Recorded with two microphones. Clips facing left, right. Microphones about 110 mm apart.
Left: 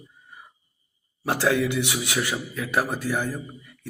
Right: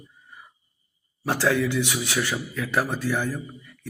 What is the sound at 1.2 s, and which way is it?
Speech, 20° left (ahead or behind).